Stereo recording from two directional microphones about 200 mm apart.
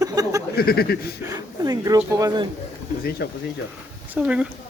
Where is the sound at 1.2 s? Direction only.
15° right (ahead or behind).